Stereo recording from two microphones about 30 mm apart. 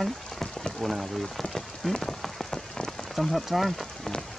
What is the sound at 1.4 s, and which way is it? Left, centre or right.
Rain on surface, centre.